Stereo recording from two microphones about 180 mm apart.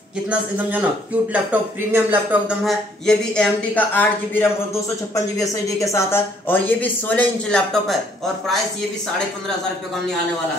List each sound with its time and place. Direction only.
0.3 s a man's voice: 10° right (ahead or behind)